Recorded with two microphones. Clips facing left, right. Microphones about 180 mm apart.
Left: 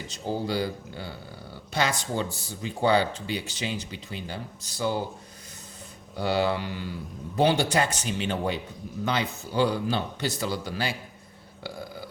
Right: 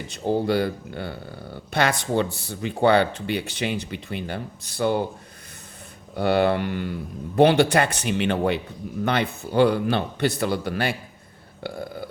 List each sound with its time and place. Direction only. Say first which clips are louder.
0.1 s speech: right 7 dB; 60° right (ahead or behind)
6.1 s speech: right 5 dB; 60° right (ahead or behind)
11.6 s a sound: right 5 dB; 55° right (ahead or behind)